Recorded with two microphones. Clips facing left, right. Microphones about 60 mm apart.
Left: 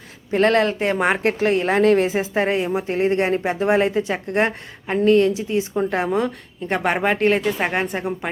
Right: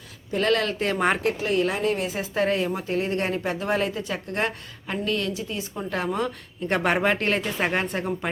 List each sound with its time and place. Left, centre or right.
0.3 s speech: left; by 1.2 s centre
1.2 s a woman's voice: left
1.7 s speech: left
2.1 s speech: left
2.8 s speech: left
6.1 s speech: centre